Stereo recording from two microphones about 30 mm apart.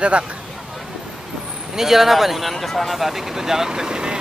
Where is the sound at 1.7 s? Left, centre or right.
Centre.